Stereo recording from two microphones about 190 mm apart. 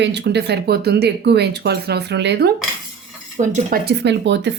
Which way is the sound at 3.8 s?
70° right (ahead or behind).